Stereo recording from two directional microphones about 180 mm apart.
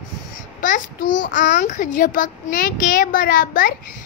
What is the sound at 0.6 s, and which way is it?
A child's voice, 50° left (ahead or behind).